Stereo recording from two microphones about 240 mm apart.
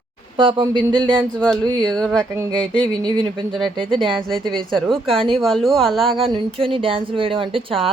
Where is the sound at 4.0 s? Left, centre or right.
Centre.